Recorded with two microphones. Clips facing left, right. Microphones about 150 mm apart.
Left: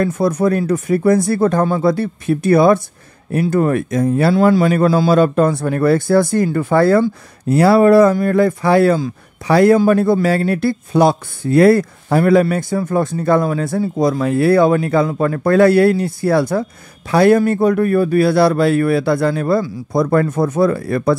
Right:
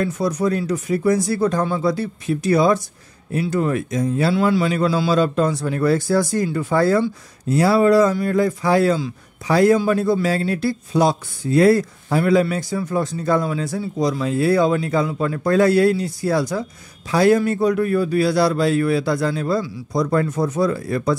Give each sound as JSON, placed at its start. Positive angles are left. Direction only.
{"t": 0.0, "sound": "speech", "side_deg": 55}